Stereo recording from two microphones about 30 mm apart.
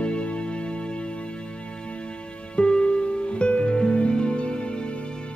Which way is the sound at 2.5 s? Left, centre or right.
Left.